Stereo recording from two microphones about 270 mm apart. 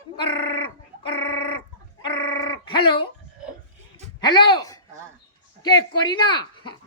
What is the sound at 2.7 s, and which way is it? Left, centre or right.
Speech, centre.